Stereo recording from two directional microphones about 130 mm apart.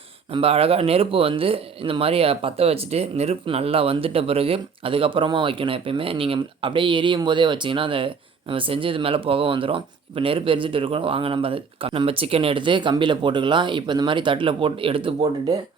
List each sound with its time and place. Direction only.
0.3 s speech: 50° right (ahead or behind)